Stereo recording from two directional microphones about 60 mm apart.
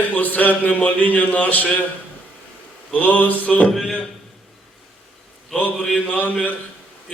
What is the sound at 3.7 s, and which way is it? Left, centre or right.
Speech, centre.